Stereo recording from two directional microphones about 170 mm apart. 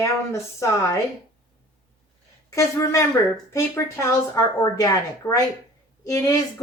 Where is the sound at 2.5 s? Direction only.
20° left (ahead or behind).